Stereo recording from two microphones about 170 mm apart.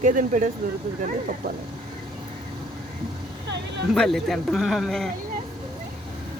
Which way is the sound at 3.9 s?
Centre (ahead or behind).